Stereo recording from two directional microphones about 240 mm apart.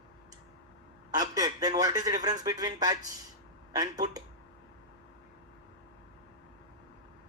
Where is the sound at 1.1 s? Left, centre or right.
Centre.